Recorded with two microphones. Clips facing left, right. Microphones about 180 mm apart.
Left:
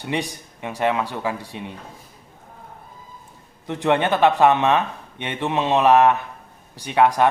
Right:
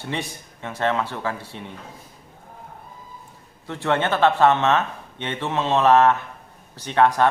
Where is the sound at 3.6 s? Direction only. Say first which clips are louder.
Left 3 dB; 15° left (ahead or behind).